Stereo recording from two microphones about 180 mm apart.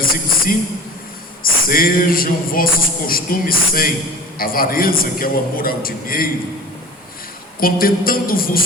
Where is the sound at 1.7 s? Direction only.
55° left (ahead or behind).